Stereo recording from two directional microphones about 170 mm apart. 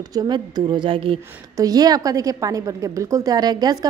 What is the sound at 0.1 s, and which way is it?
A woman's voice, 25° right (ahead or behind).